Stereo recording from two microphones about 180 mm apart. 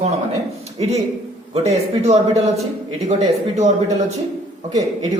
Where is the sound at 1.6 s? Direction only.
35° right (ahead or behind).